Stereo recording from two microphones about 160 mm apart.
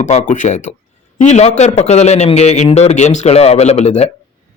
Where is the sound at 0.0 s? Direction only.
50° left (ahead or behind).